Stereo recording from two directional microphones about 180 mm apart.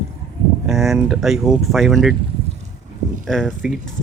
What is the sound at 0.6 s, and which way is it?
Speech, centre (ahead or behind).